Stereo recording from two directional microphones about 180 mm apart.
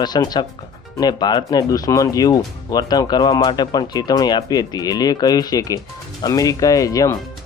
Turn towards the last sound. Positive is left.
turn(degrees=20)  # may be behind; listen again after turning